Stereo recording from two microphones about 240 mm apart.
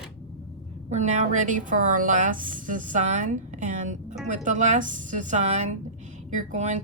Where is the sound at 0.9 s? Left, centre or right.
Right.